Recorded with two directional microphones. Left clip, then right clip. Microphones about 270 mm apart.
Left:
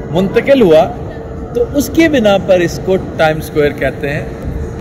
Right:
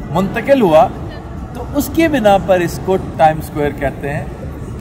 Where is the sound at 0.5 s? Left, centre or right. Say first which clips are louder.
Left 1 dB; right.